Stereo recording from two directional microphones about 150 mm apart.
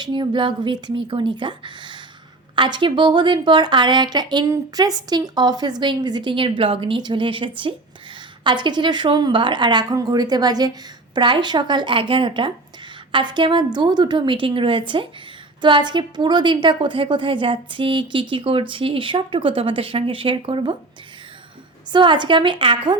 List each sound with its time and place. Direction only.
0.0 s a woman's voice: 30° right (ahead or behind)
21.9 s a woman's voice: 30° right (ahead or behind)